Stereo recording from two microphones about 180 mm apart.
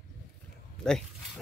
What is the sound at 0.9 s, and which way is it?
Speech, 5° left (ahead or behind).